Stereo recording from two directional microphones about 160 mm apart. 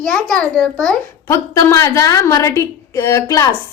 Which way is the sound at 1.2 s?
15° left (ahead or behind).